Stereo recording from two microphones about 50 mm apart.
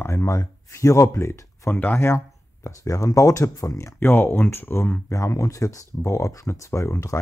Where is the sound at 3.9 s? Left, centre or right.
Left.